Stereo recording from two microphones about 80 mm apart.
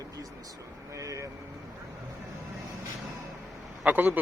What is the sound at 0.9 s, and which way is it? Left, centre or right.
Vehicle, right.